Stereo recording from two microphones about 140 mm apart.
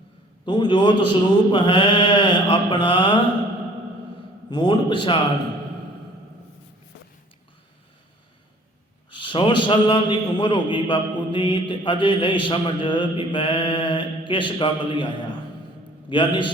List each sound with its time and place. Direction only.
0.4 s a man's voice: 30° left (ahead or behind)
4.4 s a man's voice: 30° left (ahead or behind)
9.0 s a man's voice: 35° left (ahead or behind)